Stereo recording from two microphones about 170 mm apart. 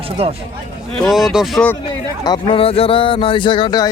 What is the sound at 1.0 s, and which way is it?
Speech, centre (ahead or behind).